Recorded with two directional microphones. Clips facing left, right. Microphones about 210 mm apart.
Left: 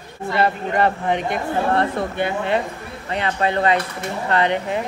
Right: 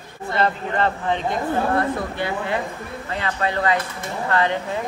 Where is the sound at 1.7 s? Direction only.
25° left (ahead or behind).